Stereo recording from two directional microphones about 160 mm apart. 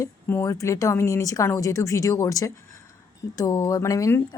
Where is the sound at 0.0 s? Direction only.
15° left (ahead or behind).